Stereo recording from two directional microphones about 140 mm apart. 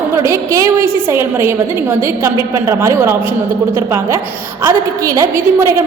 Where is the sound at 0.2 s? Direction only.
20° right (ahead or behind).